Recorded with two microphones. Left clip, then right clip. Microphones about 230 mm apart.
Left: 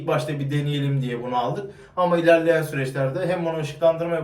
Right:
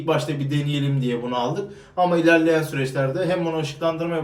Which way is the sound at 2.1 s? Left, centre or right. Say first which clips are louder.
Left 1 dB; centre.